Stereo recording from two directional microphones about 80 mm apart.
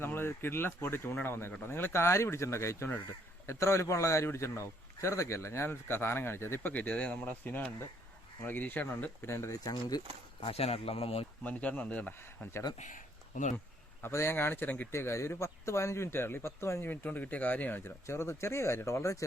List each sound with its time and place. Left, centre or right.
0.0 s a man's voice: left
9.2 s a man's voice: left
11.4 s speech: centre
14.0 s speech: left
14.9 s a man's voice: left
16.8 s speech: left
18.0 s a man's voice: left